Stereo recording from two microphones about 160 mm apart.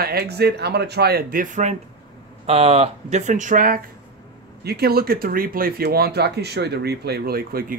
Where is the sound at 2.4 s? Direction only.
40° right (ahead or behind); by 3.8 s 55° right (ahead or behind).